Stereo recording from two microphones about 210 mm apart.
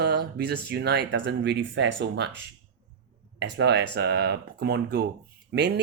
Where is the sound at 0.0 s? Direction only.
50° right (ahead or behind).